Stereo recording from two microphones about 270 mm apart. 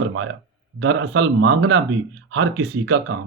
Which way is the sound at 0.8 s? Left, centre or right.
Right.